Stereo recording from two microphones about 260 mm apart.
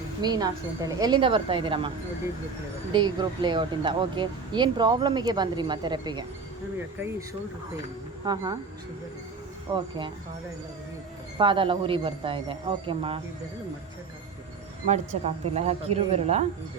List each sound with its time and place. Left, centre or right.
0.2 s a man's voice: centre
9.7 s a man's voice: centre
11.3 s a man's voice: centre
14.8 s a man's voice: right